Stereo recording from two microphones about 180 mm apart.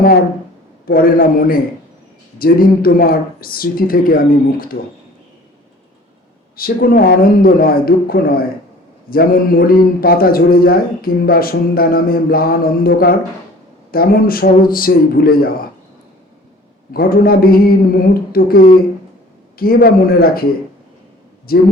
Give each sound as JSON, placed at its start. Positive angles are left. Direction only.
{"t": 0.0, "sound": "a man's voice", "side_deg": 55}
{"t": 6.6, "sound": "a man's voice", "side_deg": 55}
{"t": 16.9, "sound": "a man's voice", "side_deg": 55}
{"t": 21.5, "sound": "a man's voice", "side_deg": 55}